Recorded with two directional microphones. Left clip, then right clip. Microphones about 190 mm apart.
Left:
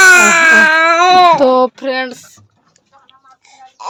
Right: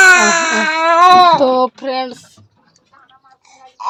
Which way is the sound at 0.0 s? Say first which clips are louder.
Left 2 dB; 40° left (ahead or behind).